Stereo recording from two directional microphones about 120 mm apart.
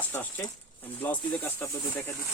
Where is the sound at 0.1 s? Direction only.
15° left (ahead or behind).